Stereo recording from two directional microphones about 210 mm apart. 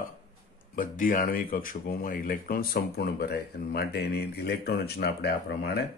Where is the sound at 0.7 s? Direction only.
40° left (ahead or behind).